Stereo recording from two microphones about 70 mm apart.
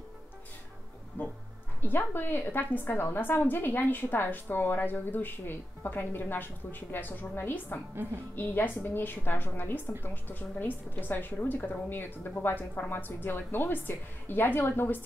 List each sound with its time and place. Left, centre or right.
1.8 s a woman's voice: left
7.9 s speech: right
8.4 s a woman's voice: left